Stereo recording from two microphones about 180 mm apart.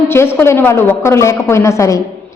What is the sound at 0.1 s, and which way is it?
A woman's voice, 15° left (ahead or behind).